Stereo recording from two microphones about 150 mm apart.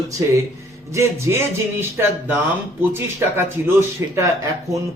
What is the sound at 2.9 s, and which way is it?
Speech, 15° right (ahead or behind).